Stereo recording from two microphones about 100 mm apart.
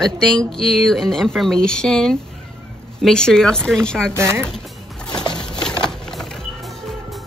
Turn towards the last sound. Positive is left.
turn(degrees=5)  # may be behind; listen again after turning